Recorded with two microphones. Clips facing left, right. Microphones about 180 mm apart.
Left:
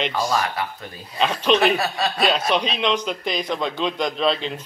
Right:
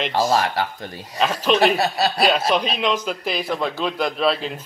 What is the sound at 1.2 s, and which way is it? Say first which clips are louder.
A man's voice: right 1 dB; centre (ahead or behind).